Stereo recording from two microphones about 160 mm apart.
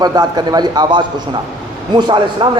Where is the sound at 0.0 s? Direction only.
25° right (ahead or behind).